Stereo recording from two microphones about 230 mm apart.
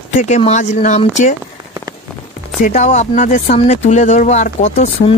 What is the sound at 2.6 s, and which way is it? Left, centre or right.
Speech, left.